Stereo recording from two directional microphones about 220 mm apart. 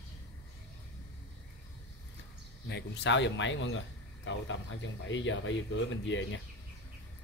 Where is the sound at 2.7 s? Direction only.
50° left (ahead or behind).